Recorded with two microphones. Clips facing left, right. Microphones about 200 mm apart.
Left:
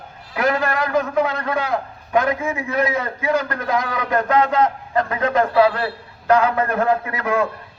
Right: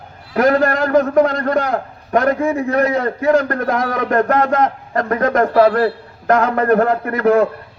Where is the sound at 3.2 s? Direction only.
45° right (ahead or behind).